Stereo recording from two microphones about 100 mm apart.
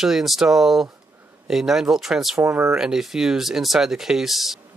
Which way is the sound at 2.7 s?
5° right (ahead or behind).